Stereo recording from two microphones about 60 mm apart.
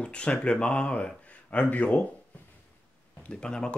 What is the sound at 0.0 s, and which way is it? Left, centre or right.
Speech, centre.